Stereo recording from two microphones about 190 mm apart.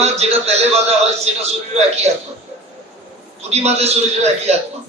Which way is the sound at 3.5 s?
35° right (ahead or behind).